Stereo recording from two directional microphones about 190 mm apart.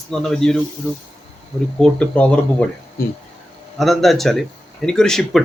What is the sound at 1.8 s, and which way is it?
Speech, 5° left (ahead or behind).